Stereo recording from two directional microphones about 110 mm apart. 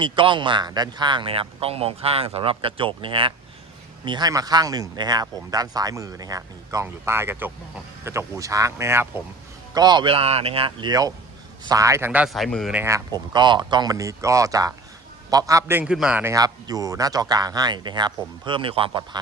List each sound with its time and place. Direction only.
0.0 s speech: 50° right (ahead or behind)
4.0 s speech: 40° right (ahead or behind)
6.8 s speech: 20° right (ahead or behind)
9.7 s speech: 40° right (ahead or behind)
10.1 s speech: 65° right (ahead or behind)
10.8 s speech: 35° right (ahead or behind)
12.3 s speech: centre (ahead or behind)
12.7 s speech: 20° right (ahead or behind)
13.1 s speech: 40° right (ahead or behind)
15.8 s a man's voice: 10° right (ahead or behind)
16.3 s speech: 35° right (ahead or behind); by 19.0 s 55° right (ahead or behind)